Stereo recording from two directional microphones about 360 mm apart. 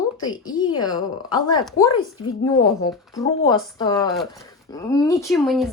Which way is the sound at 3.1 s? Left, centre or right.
Centre.